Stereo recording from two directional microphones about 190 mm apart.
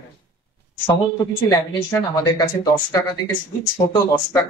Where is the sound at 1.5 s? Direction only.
20° left (ahead or behind).